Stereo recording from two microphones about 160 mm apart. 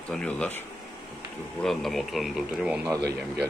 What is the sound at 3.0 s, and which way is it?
Speech, 90° right.